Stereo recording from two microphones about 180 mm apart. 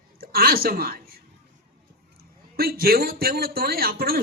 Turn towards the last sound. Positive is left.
turn(degrees=-55)  # may be behind; listen again after turning